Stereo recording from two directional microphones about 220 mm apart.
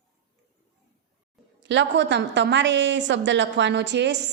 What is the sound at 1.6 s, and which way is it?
A woman's voice, 55° right (ahead or behind).